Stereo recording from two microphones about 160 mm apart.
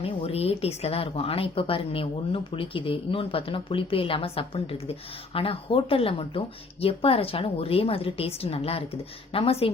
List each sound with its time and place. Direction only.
0.0 s a woman's voice: 40° left (ahead or behind)